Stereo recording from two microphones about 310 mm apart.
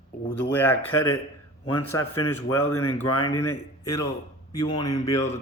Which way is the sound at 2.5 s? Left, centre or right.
Centre.